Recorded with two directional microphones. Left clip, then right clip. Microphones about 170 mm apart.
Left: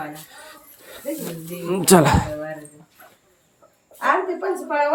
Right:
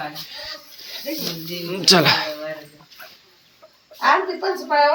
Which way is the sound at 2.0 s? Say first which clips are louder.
Right 1 dB; 35° left (ahead or behind).